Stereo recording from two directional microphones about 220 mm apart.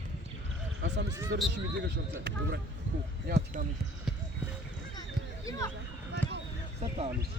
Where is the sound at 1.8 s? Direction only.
50° right (ahead or behind).